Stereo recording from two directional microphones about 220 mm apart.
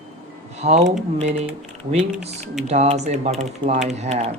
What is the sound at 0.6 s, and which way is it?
Speech, 30° right (ahead or behind).